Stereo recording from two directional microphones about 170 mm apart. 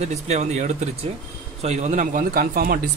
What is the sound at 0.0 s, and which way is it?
A man's voice, 40° right (ahead or behind).